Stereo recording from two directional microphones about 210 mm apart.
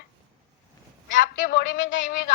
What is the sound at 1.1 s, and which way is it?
A woman's voice, 35° left (ahead or behind).